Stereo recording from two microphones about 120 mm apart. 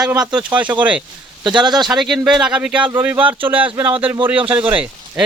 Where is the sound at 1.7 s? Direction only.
35° right (ahead or behind).